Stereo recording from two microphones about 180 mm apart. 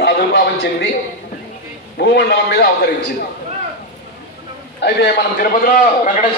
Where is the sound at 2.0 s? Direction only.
65° left (ahead or behind).